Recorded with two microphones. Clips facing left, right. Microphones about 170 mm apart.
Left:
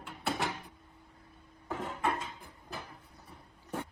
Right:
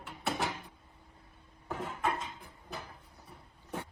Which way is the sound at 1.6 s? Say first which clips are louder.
Left 1 dB; centre (ahead or behind).